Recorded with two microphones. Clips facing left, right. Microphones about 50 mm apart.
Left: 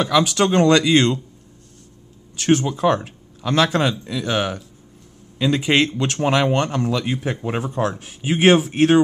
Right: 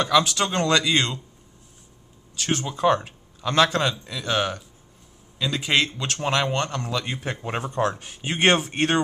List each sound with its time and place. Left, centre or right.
0.0 s speech: centre
2.4 s speech: centre
2.7 s a man's voice: centre
5.4 s a man's voice: centre